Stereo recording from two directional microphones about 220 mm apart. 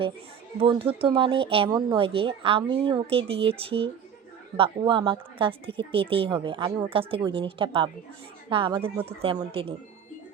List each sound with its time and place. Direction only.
0.6 s a woman's voice: 25° right (ahead or behind)